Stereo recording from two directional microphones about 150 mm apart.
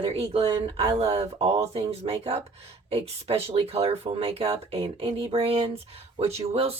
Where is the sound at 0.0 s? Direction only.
45° right (ahead or behind).